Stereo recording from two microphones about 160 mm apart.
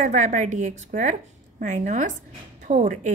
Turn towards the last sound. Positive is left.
turn(degrees=-50)  # may be behind; listen again after turning